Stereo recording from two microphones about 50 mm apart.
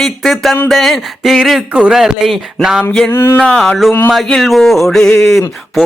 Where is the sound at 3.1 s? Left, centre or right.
Left.